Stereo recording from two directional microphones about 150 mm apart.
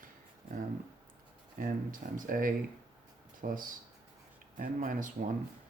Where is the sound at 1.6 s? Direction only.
65° right (ahead or behind).